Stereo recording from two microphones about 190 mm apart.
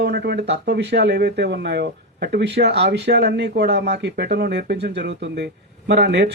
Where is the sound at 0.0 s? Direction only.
60° right (ahead or behind).